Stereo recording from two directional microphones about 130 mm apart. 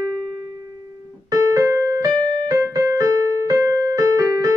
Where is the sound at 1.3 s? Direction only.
25° right (ahead or behind).